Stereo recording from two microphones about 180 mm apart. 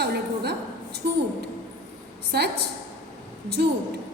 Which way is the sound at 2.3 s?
60° right (ahead or behind).